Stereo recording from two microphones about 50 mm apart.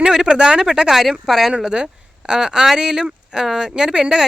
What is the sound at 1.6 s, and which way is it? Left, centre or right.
Speech, centre.